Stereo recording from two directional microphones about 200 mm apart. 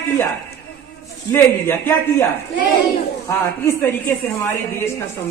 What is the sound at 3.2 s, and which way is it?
Speech, 10° left (ahead or behind).